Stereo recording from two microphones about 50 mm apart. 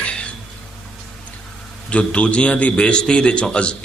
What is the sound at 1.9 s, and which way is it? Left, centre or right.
A man's voice, left.